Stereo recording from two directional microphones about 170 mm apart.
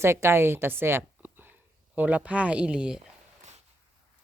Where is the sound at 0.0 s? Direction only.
15° right (ahead or behind).